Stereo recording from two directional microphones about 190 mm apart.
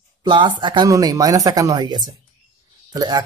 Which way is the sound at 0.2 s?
25° right (ahead or behind).